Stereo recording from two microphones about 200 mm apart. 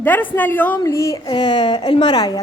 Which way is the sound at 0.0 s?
10° left (ahead or behind).